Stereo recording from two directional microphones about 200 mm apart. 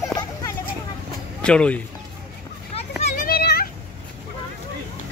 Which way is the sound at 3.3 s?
50° left (ahead or behind).